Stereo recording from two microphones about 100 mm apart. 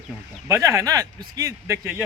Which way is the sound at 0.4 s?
30° right (ahead or behind).